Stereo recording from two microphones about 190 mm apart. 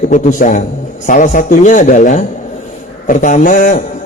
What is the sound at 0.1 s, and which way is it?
A man's voice, 40° left (ahead or behind).